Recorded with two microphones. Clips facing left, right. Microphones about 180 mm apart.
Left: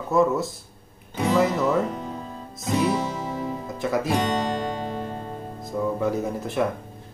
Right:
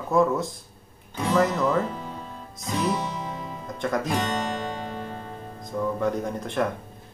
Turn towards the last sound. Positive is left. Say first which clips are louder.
# left 2 dB
turn(degrees=5)  # may be behind; listen again after turning